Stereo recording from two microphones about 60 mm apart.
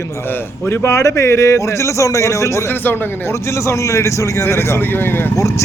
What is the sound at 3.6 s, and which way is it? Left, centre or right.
A man's voice, left.